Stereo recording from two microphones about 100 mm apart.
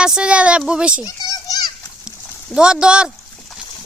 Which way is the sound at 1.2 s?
40° left (ahead or behind).